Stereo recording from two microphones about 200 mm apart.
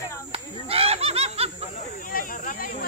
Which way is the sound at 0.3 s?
30° right (ahead or behind).